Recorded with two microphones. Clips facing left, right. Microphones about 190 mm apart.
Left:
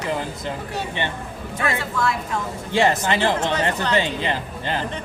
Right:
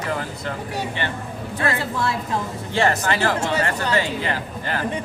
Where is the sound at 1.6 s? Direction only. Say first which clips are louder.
Even; 30° right (ahead or behind).